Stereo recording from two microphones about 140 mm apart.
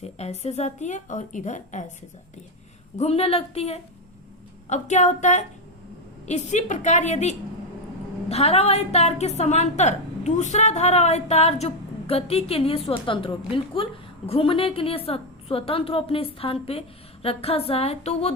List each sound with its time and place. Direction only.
0.0 s a woman's voice: 50° left (ahead or behind)
3.0 s a woman's voice: 45° left (ahead or behind)
4.7 s a woman's voice: 60° left (ahead or behind)